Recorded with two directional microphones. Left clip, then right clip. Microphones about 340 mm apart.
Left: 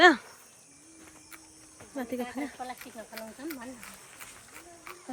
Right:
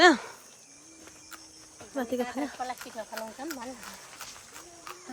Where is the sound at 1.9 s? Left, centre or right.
Centre.